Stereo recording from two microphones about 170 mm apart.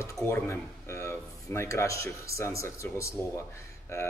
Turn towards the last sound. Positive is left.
turn(degrees=15)  # may be behind; listen again after turning